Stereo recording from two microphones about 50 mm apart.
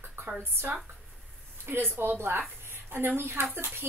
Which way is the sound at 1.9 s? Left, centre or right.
Right.